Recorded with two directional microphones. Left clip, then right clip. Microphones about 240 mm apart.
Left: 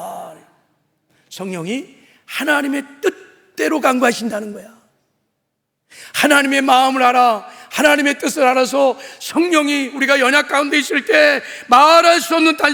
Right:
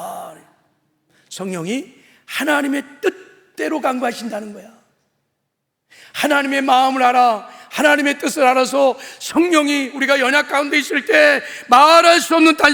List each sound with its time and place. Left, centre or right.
0.0 s a sound: centre
1.3 s a woman's voice: centre
3.0 s a man's voice: centre
3.5 s a man's voice: left
5.9 s a man's voice: left; by 12.7 s centre